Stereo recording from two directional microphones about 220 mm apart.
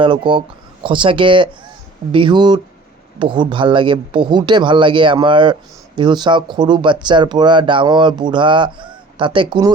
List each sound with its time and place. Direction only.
0.0 s speech: 20° right (ahead or behind)